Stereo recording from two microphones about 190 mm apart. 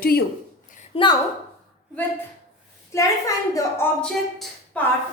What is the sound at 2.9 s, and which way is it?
Speech, 15° left (ahead or behind).